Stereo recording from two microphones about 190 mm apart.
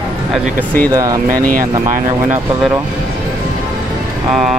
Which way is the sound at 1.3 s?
45° right (ahead or behind).